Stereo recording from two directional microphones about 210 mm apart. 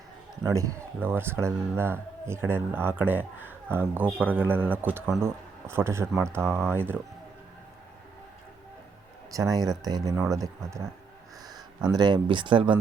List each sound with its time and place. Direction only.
0.4 s speech: 15° right (ahead or behind)
9.3 s speech: 15° right (ahead or behind)
11.9 s speech: 20° right (ahead or behind)